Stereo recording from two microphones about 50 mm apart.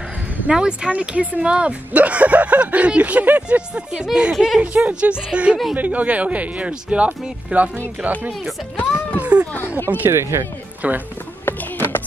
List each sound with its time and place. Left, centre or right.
0.5 s speech: centre
4.6 s speech: right
9.2 s a sound: right
10.0 s speech: right
10.8 s speech: right
11.4 s clip-clop: left